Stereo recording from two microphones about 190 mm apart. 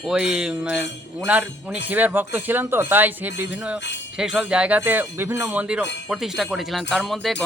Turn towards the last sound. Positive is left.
turn(degrees=0)  # may be behind; listen again after turning